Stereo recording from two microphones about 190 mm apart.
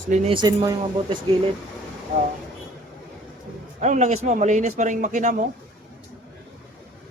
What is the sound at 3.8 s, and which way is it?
Speech, 40° right (ahead or behind).